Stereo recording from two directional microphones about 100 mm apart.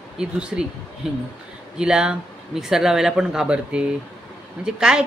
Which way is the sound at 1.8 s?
10° right (ahead or behind).